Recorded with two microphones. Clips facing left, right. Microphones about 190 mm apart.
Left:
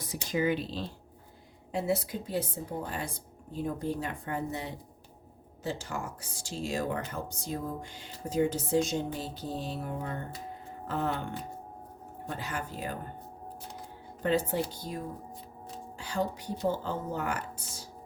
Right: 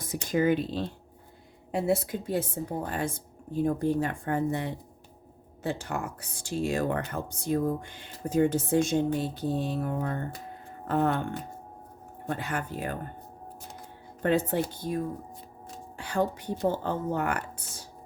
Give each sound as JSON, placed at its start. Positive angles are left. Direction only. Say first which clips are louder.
{"t": 0.0, "sound": "speech", "louder": "right 4 dB", "side_deg": -50}
{"t": 12.3, "sound": "speech", "louder": "right 5 dB", "side_deg": -55}
{"t": 14.2, "sound": "speech", "louder": "right 3 dB", "side_deg": -60}
{"t": 16.0, "sound": "speech", "louder": "right 4 dB", "side_deg": -55}